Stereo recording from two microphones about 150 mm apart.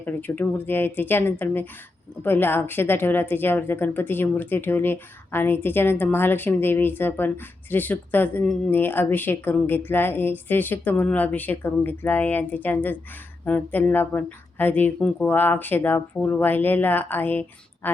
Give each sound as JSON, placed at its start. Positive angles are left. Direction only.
{"t": 0.0, "sound": "a woman's voice", "side_deg": 10}